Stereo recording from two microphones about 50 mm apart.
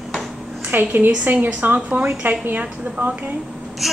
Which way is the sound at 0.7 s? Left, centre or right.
Right.